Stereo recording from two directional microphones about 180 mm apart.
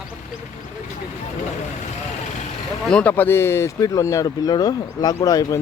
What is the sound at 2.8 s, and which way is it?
Speech, 5° left (ahead or behind).